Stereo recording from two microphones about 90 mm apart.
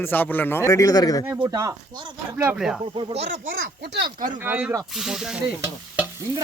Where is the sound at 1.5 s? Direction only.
35° right (ahead or behind).